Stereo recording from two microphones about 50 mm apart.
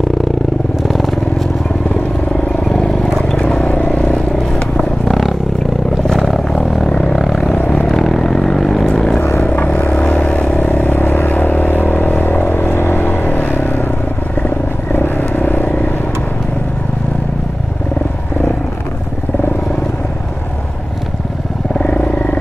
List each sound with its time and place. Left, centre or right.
0.8 s vehicle: centre
2.5 s vehicle: centre
3.3 s vehicle: centre
4.7 s vehicle: centre
6.0 s a sound: centre
6.9 s vehicle: centre
9.4 s vehicle: left
21.7 s wild animals: left